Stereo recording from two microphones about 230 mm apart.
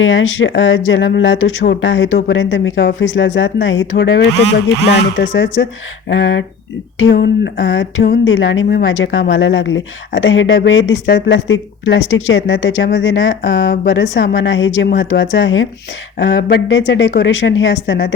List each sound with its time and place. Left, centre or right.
0.0 s speech: left